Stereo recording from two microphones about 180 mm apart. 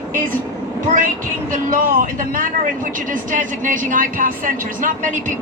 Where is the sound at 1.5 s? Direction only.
50° right (ahead or behind).